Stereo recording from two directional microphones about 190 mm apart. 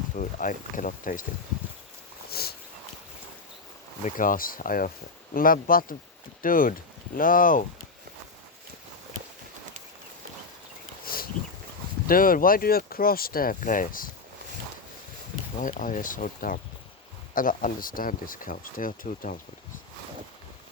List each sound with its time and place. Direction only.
0.2 s speech: 45° left (ahead or behind)
2.3 s a sound: 55° left (ahead or behind)
4.0 s speech: 45° left (ahead or behind)
11.0 s a sound: 50° left (ahead or behind)
12.0 s speech: 50° left (ahead or behind)
15.6 s speech: 45° left (ahead or behind)